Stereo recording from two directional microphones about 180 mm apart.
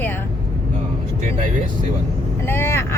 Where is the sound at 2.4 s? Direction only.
15° left (ahead or behind).